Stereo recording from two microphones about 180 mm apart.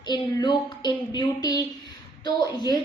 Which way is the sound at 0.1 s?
25° left (ahead or behind).